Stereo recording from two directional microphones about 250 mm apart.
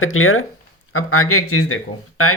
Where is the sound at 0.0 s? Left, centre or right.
Left.